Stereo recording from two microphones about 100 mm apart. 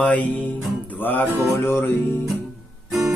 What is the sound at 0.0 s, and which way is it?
Music, 15° left (ahead or behind).